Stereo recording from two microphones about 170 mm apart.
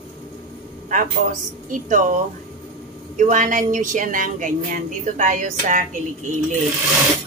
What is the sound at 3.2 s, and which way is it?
A woman's voice, 45° right (ahead or behind).